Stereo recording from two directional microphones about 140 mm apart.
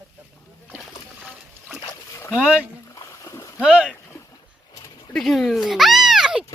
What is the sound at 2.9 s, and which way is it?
Splash, 20° left (ahead or behind).